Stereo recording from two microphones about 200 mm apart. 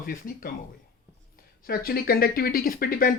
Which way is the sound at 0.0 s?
45° left (ahead or behind).